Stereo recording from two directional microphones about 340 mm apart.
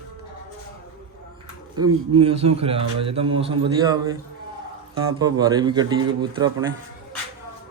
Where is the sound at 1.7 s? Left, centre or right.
Right.